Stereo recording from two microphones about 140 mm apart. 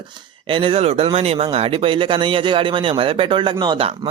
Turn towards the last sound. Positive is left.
turn(degrees=-35)  # may be behind; listen again after turning